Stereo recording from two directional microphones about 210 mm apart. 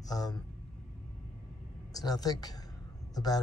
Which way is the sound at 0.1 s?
20° left (ahead or behind).